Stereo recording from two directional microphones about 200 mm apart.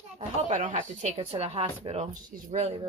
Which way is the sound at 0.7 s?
30° right (ahead or behind).